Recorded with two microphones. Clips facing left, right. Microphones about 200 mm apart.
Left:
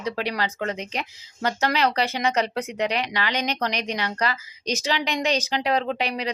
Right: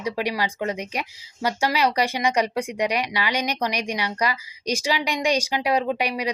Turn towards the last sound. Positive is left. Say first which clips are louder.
# right 2 dB
turn(degrees=-10)  # may be behind; listen again after turning